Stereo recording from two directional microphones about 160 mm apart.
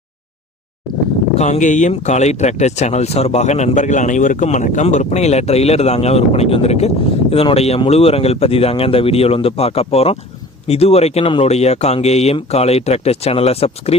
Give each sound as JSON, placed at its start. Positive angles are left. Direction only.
{"t": 1.4, "sound": "speech", "side_deg": 50}